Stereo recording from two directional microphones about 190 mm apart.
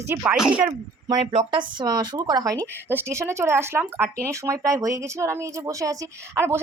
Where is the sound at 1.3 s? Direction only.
25° right (ahead or behind).